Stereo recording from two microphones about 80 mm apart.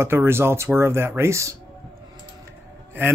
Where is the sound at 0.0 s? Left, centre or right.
Right.